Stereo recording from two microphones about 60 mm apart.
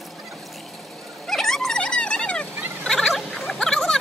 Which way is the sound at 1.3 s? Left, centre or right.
Centre.